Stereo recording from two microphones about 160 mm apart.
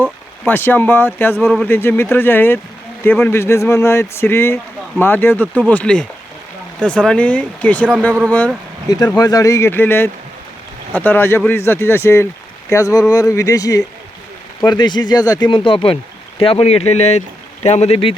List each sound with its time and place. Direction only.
0.0 s speech: 10° left (ahead or behind)
1.7 s a man's voice: 15° left (ahead or behind)
9.1 s a man's voice: 25° left (ahead or behind); by 18.1 s 40° left (ahead or behind)